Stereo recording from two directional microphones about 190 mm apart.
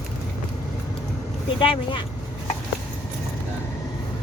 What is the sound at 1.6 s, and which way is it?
Speech, 25° left (ahead or behind).